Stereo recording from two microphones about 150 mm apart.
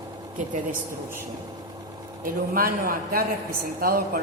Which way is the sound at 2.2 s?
75° right (ahead or behind).